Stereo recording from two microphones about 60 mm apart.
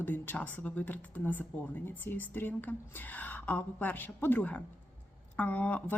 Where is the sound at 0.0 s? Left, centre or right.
Left.